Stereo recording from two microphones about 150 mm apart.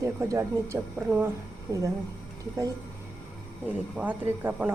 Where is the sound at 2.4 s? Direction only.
25° right (ahead or behind).